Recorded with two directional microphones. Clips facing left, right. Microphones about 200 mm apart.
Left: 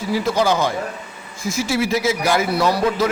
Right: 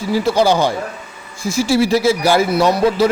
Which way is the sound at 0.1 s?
30° right (ahead or behind).